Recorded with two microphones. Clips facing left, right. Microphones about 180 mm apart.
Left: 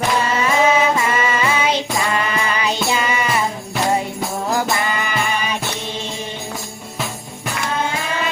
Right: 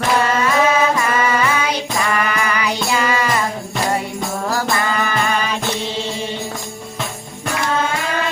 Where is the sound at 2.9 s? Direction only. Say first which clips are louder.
Right 2 dB; 20° left (ahead or behind).